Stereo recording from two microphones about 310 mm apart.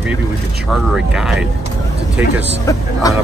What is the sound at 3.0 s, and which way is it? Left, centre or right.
Speech, centre.